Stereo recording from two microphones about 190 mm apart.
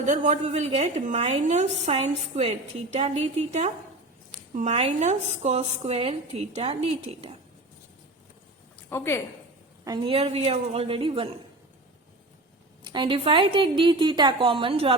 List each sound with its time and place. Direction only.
0.1 s a woman's voice: 40° right (ahead or behind)
8.9 s a woman's voice: 15° left (ahead or behind)
9.8 s a woman's voice: 25° right (ahead or behind)
12.8 s a woman's voice: 25° right (ahead or behind)